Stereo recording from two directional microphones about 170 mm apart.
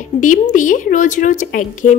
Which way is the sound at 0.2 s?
50° left (ahead or behind).